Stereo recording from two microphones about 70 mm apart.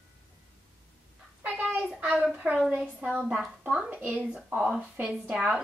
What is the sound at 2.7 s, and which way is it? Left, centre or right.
A woman's voice, centre.